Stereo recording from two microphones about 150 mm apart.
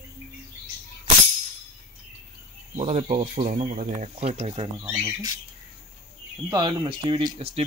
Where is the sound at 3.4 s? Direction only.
50° right (ahead or behind).